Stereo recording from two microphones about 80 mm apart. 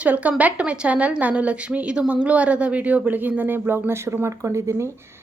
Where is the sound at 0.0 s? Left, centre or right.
Centre.